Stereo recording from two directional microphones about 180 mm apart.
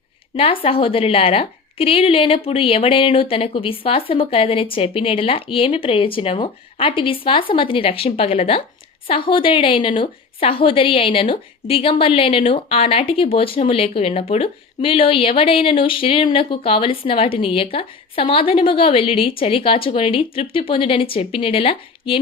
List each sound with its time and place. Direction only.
0.3 s a woman's voice: 30° left (ahead or behind)